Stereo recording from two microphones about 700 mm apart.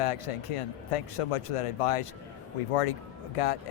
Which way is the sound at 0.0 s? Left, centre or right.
Left.